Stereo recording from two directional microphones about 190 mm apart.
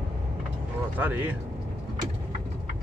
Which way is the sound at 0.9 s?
10° right (ahead or behind).